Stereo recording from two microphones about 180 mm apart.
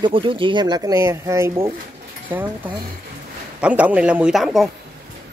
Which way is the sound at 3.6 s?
5° right (ahead or behind).